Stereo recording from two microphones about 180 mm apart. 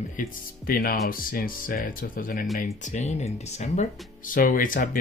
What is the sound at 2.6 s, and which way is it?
Speech, 40° left (ahead or behind).